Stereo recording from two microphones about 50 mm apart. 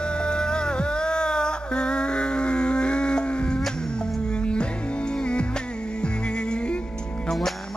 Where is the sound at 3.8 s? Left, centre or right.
Centre.